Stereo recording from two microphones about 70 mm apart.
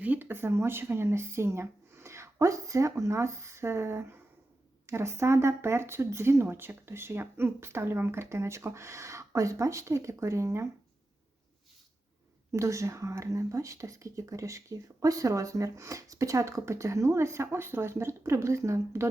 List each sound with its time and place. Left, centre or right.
0.0 s speech: right
12.5 s speech: right